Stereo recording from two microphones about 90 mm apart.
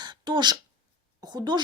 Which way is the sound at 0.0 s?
55° right (ahead or behind).